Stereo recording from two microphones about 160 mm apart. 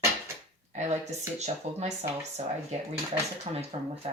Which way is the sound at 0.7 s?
45° right (ahead or behind).